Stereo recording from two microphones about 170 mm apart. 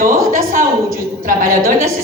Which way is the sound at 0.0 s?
55° right (ahead or behind).